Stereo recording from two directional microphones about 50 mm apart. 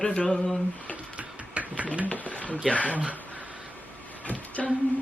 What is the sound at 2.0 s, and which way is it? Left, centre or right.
Speech, left.